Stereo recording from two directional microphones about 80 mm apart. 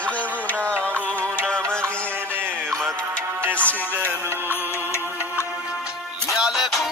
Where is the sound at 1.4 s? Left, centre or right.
Centre.